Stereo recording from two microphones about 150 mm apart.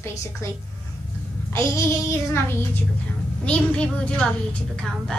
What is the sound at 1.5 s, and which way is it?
A child's voice, 20° left (ahead or behind).